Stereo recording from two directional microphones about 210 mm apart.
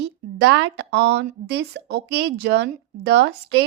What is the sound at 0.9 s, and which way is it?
Speech, 55° right (ahead or behind).